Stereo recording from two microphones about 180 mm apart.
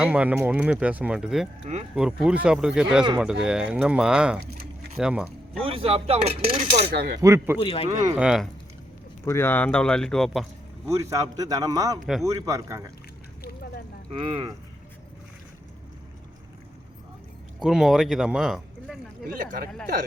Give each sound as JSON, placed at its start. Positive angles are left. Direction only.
{"t": 0.0, "sound": "speech", "side_deg": -5}
{"t": 5.6, "sound": "speech", "side_deg": -30}
{"t": 6.9, "sound": "speech", "side_deg": -60}
{"t": 7.2, "sound": "speech", "side_deg": -15}
{"t": 7.6, "sound": "speech", "side_deg": 35}
{"t": 8.1, "sound": "speech", "side_deg": -5}
{"t": 9.2, "sound": "speech", "side_deg": 15}
{"t": 10.8, "sound": "speech", "side_deg": -15}
{"t": 14.1, "sound": "speech", "side_deg": -30}
{"t": 17.6, "sound": "speech", "side_deg": 0}
{"t": 19.2, "sound": "speech", "side_deg": -50}